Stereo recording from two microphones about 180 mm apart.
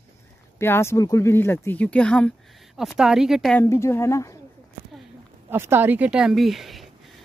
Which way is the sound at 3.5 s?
15° left (ahead or behind).